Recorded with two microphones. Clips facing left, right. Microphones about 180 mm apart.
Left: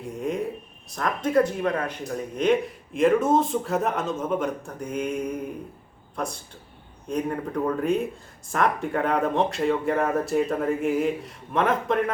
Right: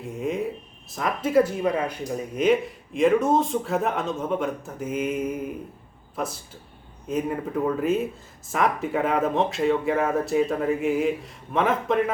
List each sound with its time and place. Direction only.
0.0 s speech: centre (ahead or behind)